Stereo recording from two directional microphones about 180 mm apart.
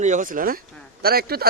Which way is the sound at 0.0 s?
45° right (ahead or behind).